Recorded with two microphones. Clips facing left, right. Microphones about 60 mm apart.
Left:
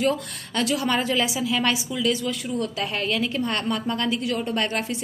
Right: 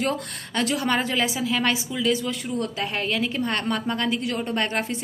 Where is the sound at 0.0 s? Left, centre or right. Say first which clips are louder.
Left 2 dB; right.